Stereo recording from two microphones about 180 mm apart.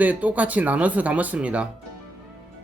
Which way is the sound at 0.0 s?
10° right (ahead or behind).